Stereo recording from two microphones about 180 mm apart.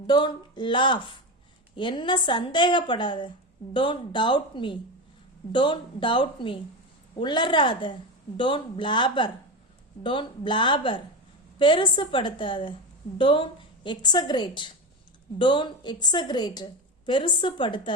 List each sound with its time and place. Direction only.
0.1 s a woman's voice: 25° left (ahead or behind)